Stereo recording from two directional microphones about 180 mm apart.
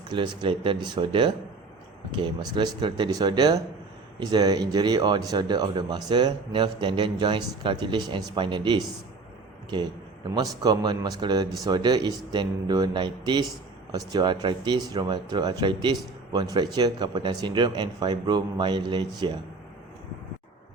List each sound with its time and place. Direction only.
0.1 s speech: 30° right (ahead or behind)